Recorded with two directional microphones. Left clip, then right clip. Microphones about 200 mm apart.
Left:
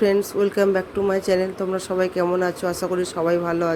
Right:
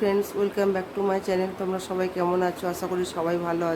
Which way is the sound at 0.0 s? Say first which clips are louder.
Left 5 dB; 20° left (ahead or behind).